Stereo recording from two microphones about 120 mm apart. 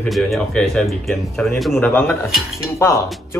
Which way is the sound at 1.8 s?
15° left (ahead or behind).